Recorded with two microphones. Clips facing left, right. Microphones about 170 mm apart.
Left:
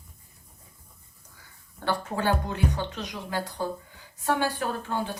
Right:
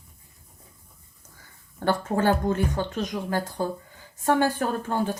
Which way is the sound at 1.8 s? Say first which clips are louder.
Right 5 dB; 45° right (ahead or behind).